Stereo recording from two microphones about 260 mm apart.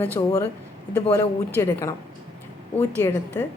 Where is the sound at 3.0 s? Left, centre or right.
Centre.